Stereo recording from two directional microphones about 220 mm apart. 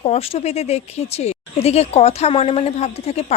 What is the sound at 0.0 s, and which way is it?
Speech, 25° left (ahead or behind).